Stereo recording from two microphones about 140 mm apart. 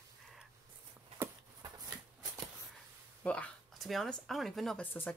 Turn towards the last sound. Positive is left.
turn(degrees=15)  # may be behind; listen again after turning